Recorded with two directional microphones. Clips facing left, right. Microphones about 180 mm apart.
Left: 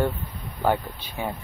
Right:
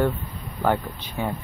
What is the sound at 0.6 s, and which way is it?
Speech, 15° left (ahead or behind).